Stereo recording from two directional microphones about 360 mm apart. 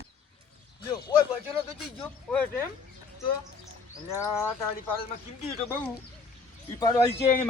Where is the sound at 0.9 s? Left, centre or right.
Centre.